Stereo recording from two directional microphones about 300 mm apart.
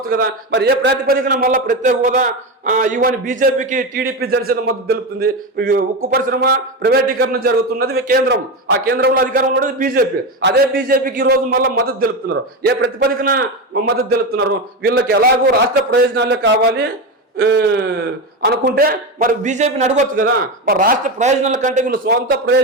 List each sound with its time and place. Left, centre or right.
0.1 s a man's voice: right